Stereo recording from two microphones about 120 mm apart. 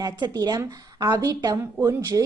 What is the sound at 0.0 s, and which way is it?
A woman's voice, 35° right (ahead or behind).